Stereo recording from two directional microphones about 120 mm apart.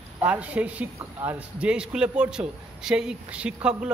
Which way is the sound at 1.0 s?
25° right (ahead or behind).